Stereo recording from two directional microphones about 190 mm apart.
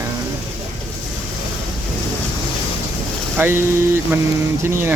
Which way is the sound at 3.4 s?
10° right (ahead or behind).